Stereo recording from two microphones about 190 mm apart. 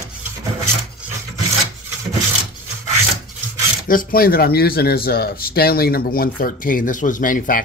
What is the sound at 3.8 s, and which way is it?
Speech, 50° left (ahead or behind).